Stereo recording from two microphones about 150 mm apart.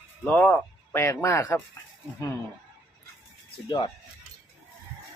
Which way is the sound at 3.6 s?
30° left (ahead or behind).